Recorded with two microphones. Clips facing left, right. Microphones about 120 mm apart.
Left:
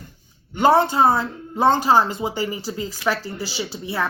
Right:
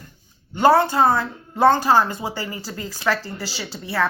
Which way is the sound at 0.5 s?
20° left (ahead or behind).